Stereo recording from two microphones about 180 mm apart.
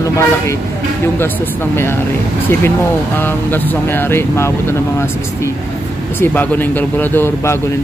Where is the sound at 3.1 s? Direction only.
10° left (ahead or behind).